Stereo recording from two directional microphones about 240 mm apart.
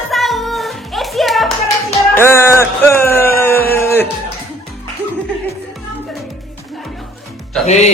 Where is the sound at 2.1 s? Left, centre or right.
Centre.